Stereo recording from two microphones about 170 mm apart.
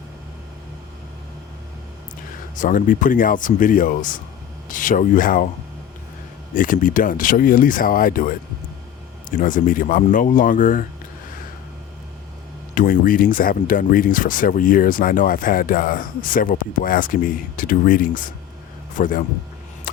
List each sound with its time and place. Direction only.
2.6 s speech: 50° left (ahead or behind)
6.5 s speech: 50° left (ahead or behind)
9.3 s speech: 50° left (ahead or behind)
12.7 s speech: 50° left (ahead or behind)